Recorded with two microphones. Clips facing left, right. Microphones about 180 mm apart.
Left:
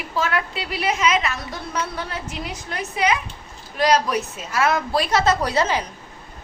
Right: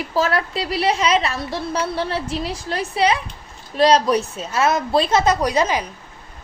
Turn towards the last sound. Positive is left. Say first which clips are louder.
# right 2 dB
turn(degrees=-15)  # may be behind; listen again after turning